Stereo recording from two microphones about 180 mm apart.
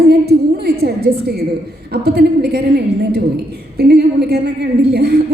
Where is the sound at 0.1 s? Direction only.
65° right (ahead or behind).